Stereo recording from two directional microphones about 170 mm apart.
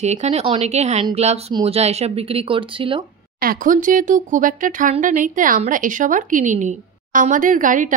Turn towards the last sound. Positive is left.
turn(degrees=-50)  # may be behind; listen again after turning